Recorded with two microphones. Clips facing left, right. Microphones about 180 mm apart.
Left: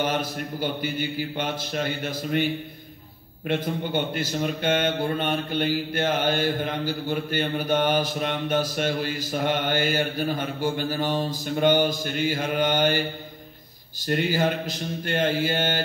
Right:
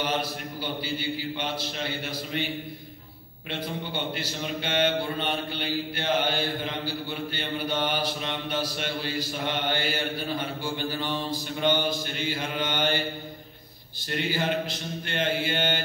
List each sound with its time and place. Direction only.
0.0 s a man's voice: 50° left (ahead or behind)
3.4 s a man's voice: 50° left (ahead or behind)
14.0 s a man's voice: 45° left (ahead or behind)